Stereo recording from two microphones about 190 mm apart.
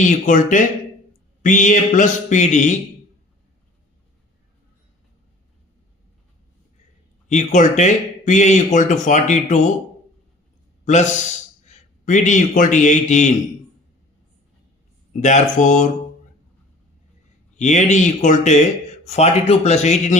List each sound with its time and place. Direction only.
0.1 s speech: 45° left (ahead or behind)
7.3 s speech: 40° left (ahead or behind)
10.8 s a man's voice: 40° left (ahead or behind)
15.2 s speech: 40° left (ahead or behind)
17.6 s speech: 40° left (ahead or behind)